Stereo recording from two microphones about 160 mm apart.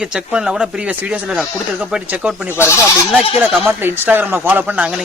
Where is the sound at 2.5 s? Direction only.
15° left (ahead or behind).